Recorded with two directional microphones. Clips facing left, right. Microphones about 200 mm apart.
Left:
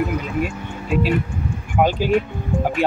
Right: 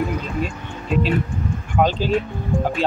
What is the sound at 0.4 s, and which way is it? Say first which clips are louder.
Speech: left 2 dB; 10° left (ahead or behind).